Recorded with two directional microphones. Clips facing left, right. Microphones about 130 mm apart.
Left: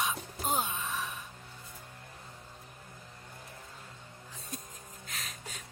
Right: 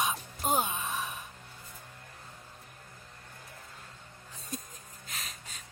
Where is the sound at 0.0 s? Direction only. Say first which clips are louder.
Right 2 dB; 15° right (ahead or behind).